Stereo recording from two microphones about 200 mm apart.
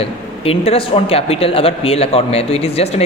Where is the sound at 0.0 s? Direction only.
30° left (ahead or behind).